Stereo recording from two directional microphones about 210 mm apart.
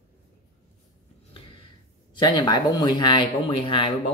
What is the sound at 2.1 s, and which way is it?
Speech, 20° left (ahead or behind).